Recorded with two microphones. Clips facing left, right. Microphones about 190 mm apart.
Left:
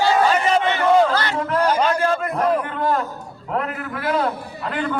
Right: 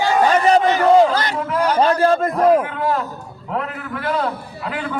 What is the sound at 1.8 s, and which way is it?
Speech, 35° right (ahead or behind).